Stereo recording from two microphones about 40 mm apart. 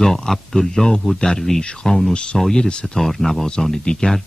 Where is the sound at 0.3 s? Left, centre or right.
Centre.